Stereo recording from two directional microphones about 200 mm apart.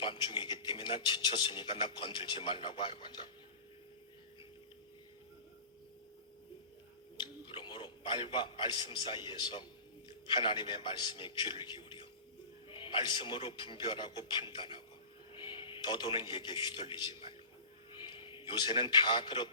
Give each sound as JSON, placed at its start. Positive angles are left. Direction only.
{"t": 0.0, "sound": "speech", "side_deg": 25}
{"t": 7.2, "sound": "a man's voice", "side_deg": 25}